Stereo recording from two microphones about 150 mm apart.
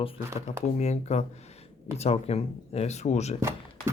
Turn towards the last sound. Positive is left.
turn(degrees=-15)  # may be behind; listen again after turning